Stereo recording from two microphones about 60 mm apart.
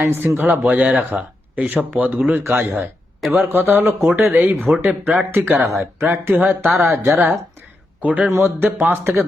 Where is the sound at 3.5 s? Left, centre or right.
Right.